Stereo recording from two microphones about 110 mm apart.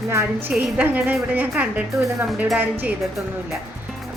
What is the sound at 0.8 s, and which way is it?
A woman's voice, 15° right (ahead or behind).